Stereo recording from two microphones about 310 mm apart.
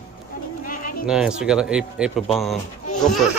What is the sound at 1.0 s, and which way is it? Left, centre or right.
Speech, centre.